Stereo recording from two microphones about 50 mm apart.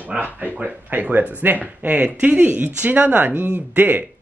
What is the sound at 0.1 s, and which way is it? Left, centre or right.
Speech, right.